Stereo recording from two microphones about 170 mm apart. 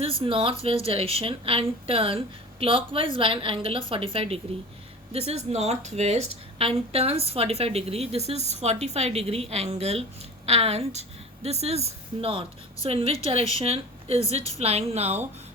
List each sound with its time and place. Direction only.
0.0 s a woman's voice: 30° right (ahead or behind)